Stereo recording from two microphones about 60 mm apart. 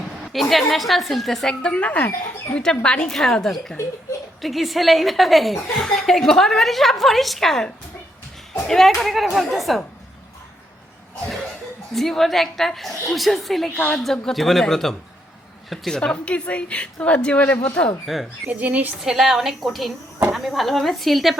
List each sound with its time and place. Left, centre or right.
0.4 s a woman's voice: centre
1.7 s a woman's voice: left; by 9.8 s centre
11.9 s a woman's voice: centre
16.0 s a woman's voice: centre
18.0 s a woman's voice: centre
18.4 s a woman's voice: right
19.0 s a woman's voice: centre